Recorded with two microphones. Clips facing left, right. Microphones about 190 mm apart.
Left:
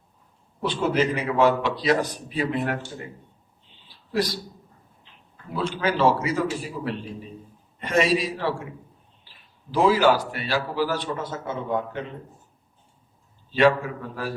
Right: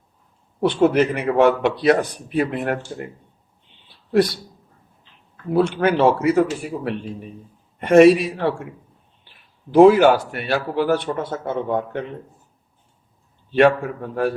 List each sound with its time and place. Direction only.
0.6 s a man's voice: 60° right (ahead or behind)
4.1 s a man's voice: 60° right (ahead or behind)
5.5 s a man's voice: 60° right (ahead or behind)
13.5 s a man's voice: 60° right (ahead or behind)